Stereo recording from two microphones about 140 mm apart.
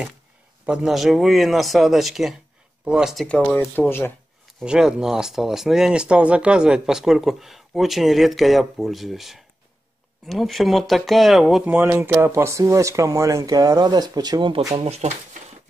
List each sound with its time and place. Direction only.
0.7 s speech: centre (ahead or behind)
3.3 s speech: 10° left (ahead or behind)
4.6 s speech: 5° right (ahead or behind)
11.7 s speech: 10° right (ahead or behind); by 14.8 s 30° right (ahead or behind)
14.8 s speech: 50° right (ahead or behind)